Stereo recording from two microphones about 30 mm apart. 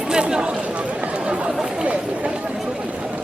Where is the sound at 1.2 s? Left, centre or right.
Right.